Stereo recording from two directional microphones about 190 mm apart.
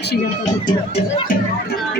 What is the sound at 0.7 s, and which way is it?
Speech, 35° left (ahead or behind).